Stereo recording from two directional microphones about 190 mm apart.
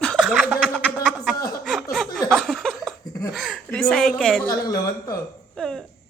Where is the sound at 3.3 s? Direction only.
Centre (ahead or behind).